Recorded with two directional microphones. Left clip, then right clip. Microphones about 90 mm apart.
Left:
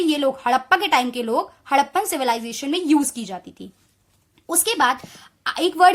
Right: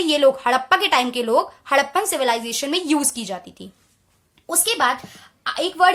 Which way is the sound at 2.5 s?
25° left (ahead or behind).